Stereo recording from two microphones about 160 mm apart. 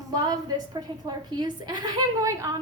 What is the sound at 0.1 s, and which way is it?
A woman's voice, 25° right (ahead or behind).